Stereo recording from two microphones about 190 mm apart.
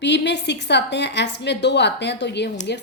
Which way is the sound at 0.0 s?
65° left (ahead or behind).